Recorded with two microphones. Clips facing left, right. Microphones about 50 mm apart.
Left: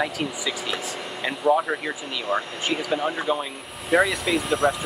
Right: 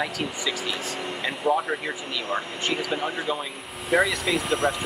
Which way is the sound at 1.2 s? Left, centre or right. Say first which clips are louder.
Left 3 dB; centre.